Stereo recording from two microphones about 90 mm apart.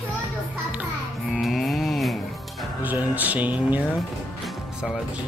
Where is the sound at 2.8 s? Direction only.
20° right (ahead or behind).